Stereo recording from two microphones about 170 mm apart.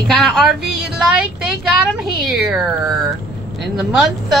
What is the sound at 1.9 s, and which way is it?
Speech, 5° right (ahead or behind).